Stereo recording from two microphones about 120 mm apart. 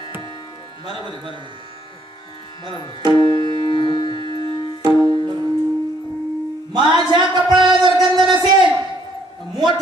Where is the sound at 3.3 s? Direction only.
45° right (ahead or behind).